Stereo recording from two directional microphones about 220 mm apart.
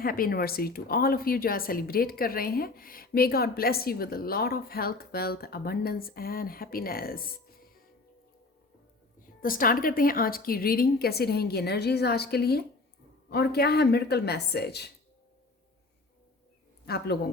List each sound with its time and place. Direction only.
0.0 s a woman's voice: 40° left (ahead or behind)
9.2 s a woman's voice: 40° left (ahead or behind)
16.8 s a man's voice: 45° left (ahead or behind)